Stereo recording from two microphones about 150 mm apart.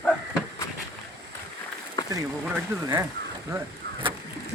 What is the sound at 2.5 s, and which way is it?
Speech, 15° right (ahead or behind).